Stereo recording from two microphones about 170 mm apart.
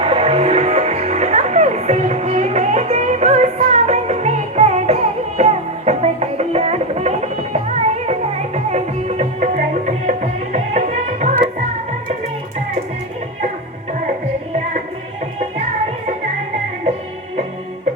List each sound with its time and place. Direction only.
0.0 s music: 35° right (ahead or behind)